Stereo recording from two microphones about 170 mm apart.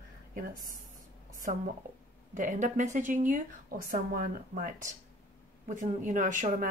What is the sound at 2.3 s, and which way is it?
A woman's voice, 45° right (ahead or behind).